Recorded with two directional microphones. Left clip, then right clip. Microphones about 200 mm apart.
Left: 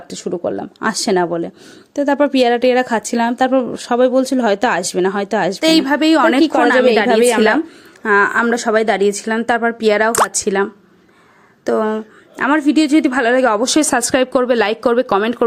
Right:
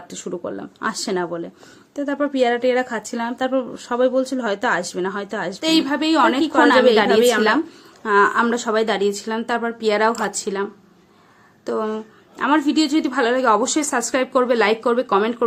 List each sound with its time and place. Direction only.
0.1 s speech: 25° left (ahead or behind)
7.1 s speech: 40° left (ahead or behind)
7.3 s speech: 20° left (ahead or behind)